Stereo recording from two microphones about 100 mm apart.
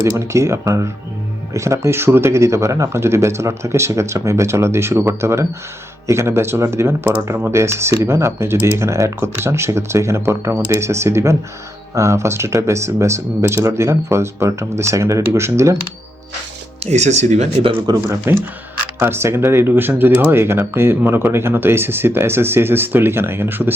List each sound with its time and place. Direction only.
0.0 s speech: 30° right (ahead or behind)
16.8 s speech: 90° right
18.3 s speech: 25° right (ahead or behind)